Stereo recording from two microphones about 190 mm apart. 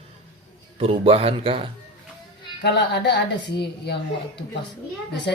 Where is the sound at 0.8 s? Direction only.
30° right (ahead or behind).